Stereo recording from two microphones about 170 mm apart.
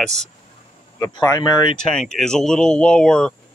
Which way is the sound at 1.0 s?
20° left (ahead or behind).